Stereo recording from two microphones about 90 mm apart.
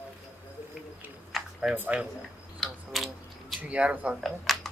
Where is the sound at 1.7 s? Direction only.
20° right (ahead or behind).